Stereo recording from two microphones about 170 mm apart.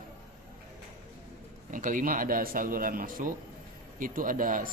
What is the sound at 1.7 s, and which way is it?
A man's voice, 50° right (ahead or behind).